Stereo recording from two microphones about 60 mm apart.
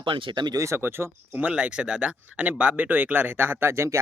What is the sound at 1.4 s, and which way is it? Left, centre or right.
Speech, right.